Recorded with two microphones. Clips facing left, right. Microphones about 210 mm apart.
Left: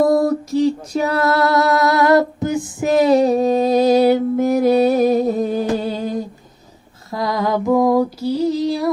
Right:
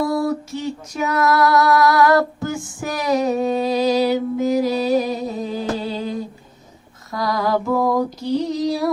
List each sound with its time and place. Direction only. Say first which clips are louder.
0.0 s female singing: left 5 dB; 45° left (ahead or behind)
7.1 s mantra: left 1 dB; 25° left (ahead or behind); by 8.9 s centre (ahead or behind)